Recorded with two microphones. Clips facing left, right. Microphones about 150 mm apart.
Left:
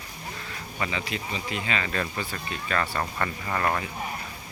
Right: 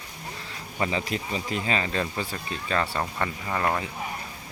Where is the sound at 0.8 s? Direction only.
35° right (ahead or behind); by 3.8 s 10° right (ahead or behind).